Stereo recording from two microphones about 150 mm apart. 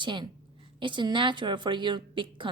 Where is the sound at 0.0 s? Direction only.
30° right (ahead or behind).